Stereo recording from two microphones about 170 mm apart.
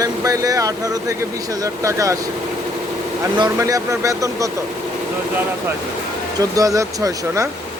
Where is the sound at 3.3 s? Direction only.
25° right (ahead or behind).